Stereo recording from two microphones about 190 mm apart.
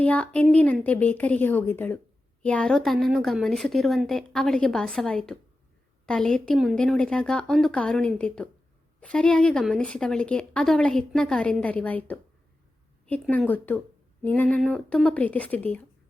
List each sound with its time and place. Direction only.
0.0 s a woman's voice: 5° left (ahead or behind)